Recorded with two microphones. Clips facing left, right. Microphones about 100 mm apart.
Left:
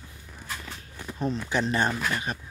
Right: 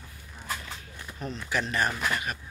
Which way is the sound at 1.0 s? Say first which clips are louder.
Left 8 dB; 35° left (ahead or behind).